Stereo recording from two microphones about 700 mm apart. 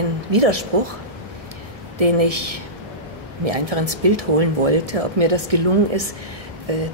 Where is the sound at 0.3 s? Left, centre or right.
Right.